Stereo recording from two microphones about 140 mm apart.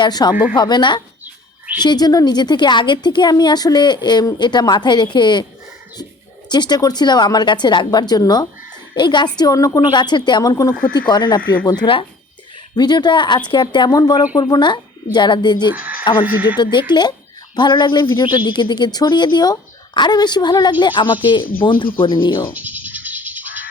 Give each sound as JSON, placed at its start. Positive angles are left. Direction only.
{"t": 0.0, "sound": "a woman's voice", "side_deg": 30}
{"t": 1.2, "sound": "bird", "side_deg": -15}
{"t": 1.8, "sound": "speech", "side_deg": 30}
{"t": 6.5, "sound": "a woman's voice", "side_deg": 30}
{"t": 15.7, "sound": "speech", "side_deg": -10}
{"t": 16.9, "sound": "speech", "side_deg": 30}
{"t": 22.5, "sound": "music", "side_deg": -10}